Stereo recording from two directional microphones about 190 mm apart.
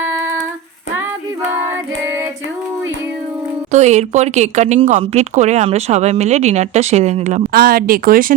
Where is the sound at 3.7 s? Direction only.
35° right (ahead or behind).